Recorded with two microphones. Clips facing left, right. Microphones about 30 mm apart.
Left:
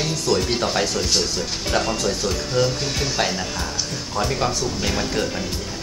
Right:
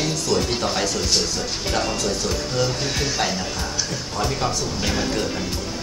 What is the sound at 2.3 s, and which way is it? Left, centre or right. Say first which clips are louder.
Speech: left 2 dB; centre.